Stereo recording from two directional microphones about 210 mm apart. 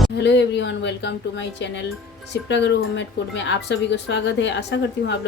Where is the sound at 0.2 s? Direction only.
55° left (ahead or behind).